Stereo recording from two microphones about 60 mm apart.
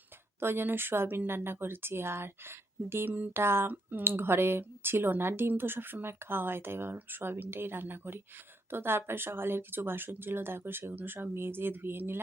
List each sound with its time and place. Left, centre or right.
0.3 s speech: right